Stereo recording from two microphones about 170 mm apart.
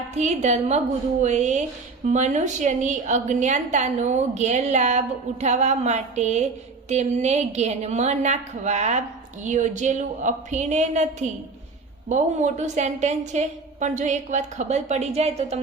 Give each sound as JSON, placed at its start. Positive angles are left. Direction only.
{"t": 0.2, "sound": "a woman's voice", "side_deg": -40}